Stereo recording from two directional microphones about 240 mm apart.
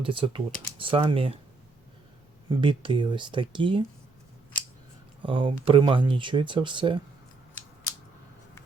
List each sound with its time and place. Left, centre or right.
0.0 s speech: right
2.5 s speech: right
5.2 s speech: right